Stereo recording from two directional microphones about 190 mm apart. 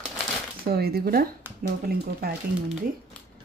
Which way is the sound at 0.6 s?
55° right (ahead or behind).